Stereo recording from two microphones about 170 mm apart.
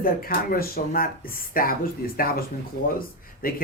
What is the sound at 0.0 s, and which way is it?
Speech, 60° left (ahead or behind).